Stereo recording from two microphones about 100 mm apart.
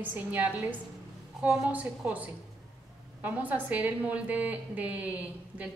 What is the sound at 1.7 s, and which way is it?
A woman's voice, 15° right (ahead or behind).